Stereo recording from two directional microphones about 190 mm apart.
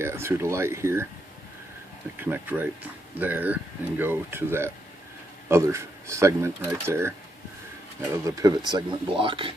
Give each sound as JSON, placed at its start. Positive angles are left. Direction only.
{"t": 0.0, "sound": "speech", "side_deg": -15}
{"t": 2.1, "sound": "speech", "side_deg": -10}